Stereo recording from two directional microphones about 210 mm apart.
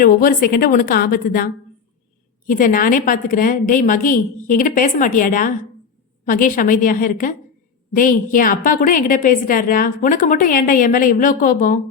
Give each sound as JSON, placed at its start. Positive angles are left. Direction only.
{"t": 0.0, "sound": "a woman's voice", "side_deg": 45}
{"t": 2.5, "sound": "a woman's voice", "side_deg": 40}